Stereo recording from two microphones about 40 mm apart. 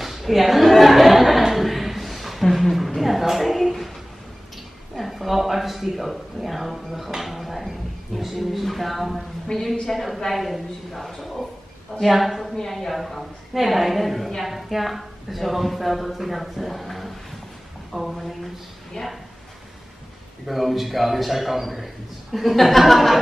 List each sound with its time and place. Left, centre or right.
0.0 s chuckle: centre
4.9 s speech: centre
18.9 s speech: left
20.4 s speech: centre